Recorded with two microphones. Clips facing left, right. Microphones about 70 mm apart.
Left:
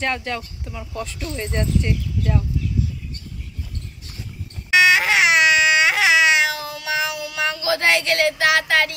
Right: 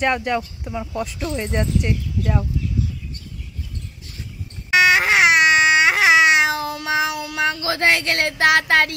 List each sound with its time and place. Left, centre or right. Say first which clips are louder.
0.0 s speech: right 5 dB; centre
4.6 s baby cry: even; right